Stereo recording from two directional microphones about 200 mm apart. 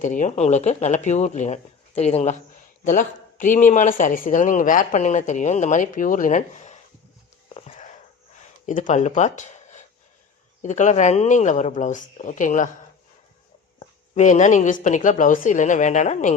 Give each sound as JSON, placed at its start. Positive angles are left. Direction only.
{"t": 0.0, "sound": "speech", "side_deg": 40}
{"t": 7.5, "sound": "a sound", "side_deg": 30}
{"t": 10.6, "sound": "speech", "side_deg": 35}
{"t": 13.7, "sound": "speech", "side_deg": 35}